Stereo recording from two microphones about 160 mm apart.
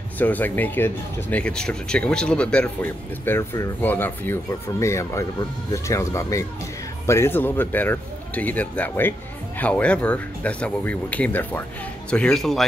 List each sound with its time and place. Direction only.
0.2 s a man's voice: 10° left (ahead or behind)